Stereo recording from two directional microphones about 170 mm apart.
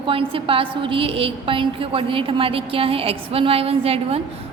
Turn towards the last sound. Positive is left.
turn(degrees=-35)  # may be behind; listen again after turning